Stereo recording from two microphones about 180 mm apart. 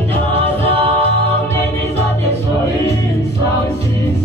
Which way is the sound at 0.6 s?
35° right (ahead or behind).